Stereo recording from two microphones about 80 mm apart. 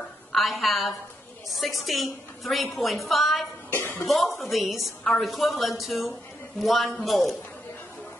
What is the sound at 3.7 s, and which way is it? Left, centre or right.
Speech, left.